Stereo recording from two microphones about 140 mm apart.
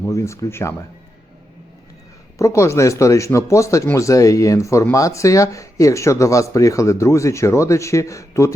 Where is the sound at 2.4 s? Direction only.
20° left (ahead or behind).